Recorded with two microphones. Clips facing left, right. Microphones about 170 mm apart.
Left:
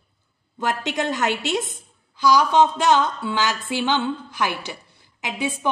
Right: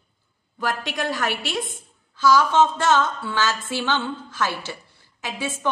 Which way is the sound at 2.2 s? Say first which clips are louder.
Left 1 dB; 15° left (ahead or behind).